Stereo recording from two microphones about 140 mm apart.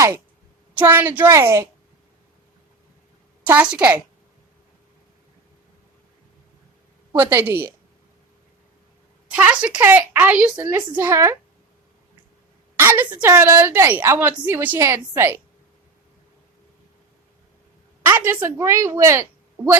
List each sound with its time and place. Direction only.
0.7 s a woman's voice: 15° right (ahead or behind)
3.4 s a woman's voice: 10° right (ahead or behind)
7.2 s a woman's voice: 15° right (ahead or behind)
9.3 s a woman's voice: 10° right (ahead or behind)
12.8 s a woman's voice: 15° right (ahead or behind)
18.0 s a woman's voice: 15° right (ahead or behind)